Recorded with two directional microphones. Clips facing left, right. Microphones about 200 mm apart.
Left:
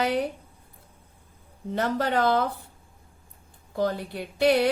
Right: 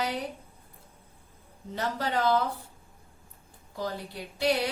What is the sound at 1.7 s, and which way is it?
Speech, 55° left (ahead or behind).